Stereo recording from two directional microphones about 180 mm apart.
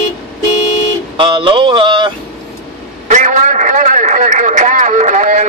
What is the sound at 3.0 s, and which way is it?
A man's voice, 45° right (ahead or behind).